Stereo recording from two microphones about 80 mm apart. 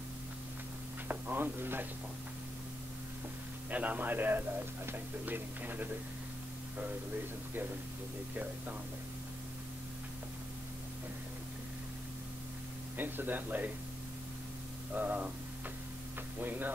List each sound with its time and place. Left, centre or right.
1.0 s speech: right
3.7 s speech: centre
12.9 s speech: right
15.0 s speech: right
16.3 s speech: right